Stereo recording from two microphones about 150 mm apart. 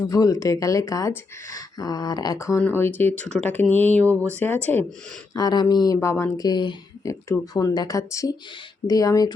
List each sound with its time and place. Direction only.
0.0 s speech: 20° left (ahead or behind)
4.0 s speech: 20° right (ahead or behind)
4.4 s speech: 10° left (ahead or behind)
5.3 s speech: 25° left (ahead or behind)